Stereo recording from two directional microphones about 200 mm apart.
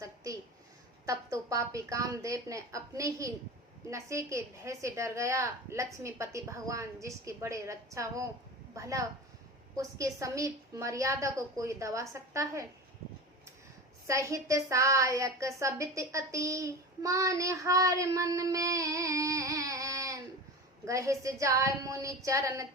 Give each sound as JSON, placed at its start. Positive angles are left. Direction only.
{"t": 1.0, "sound": "a woman's voice", "side_deg": -15}
{"t": 14.1, "sound": "a woman's voice", "side_deg": -15}